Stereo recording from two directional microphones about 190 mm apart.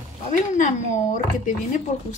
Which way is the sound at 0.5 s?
40° left (ahead or behind).